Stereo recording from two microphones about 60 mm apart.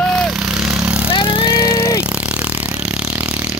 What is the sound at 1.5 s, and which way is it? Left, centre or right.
Vehicle, left.